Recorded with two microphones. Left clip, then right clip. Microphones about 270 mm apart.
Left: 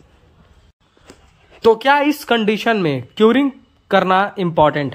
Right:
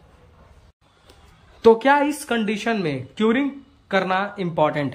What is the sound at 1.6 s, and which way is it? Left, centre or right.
Speech, centre.